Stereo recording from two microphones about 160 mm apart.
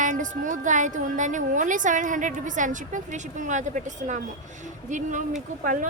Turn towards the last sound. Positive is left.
turn(degrees=-55)  # may be behind; listen again after turning